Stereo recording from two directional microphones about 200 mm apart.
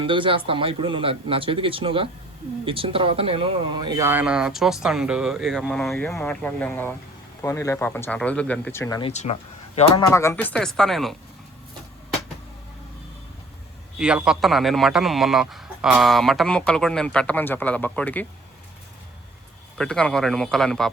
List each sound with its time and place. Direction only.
0.0 s speech: 25° right (ahead or behind); by 9.0 s 10° left (ahead or behind)
9.0 s speech: 30° left (ahead or behind)
10.1 s speech: 15° left (ahead or behind)
14.0 s speech: 5° right (ahead or behind)
19.8 s speech: 5° left (ahead or behind)